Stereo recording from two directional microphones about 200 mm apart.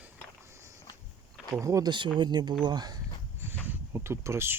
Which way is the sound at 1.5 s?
15° right (ahead or behind).